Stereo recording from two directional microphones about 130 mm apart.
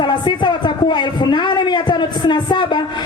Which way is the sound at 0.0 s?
35° left (ahead or behind).